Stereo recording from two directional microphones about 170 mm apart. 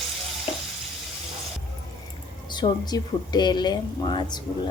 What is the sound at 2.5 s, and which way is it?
Speech, 25° left (ahead or behind).